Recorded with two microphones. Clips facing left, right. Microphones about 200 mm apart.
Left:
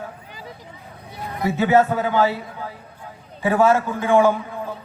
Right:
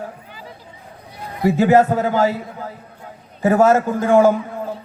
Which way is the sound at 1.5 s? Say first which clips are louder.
Right 4 dB; 40° right (ahead or behind).